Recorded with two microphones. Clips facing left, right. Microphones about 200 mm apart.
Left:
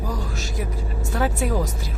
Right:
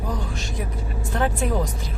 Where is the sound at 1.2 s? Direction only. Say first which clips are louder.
Even; 5° left (ahead or behind).